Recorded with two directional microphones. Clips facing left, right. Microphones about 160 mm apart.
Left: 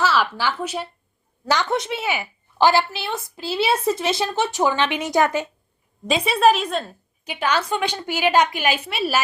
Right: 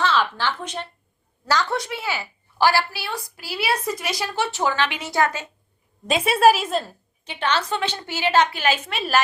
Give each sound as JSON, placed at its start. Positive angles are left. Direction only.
{"t": 0.0, "sound": "a woman's voice", "side_deg": 10}
{"t": 1.5, "sound": "a woman's voice", "side_deg": 20}
{"t": 6.1, "sound": "a woman's voice", "side_deg": 0}
{"t": 7.3, "sound": "a woman's voice", "side_deg": 10}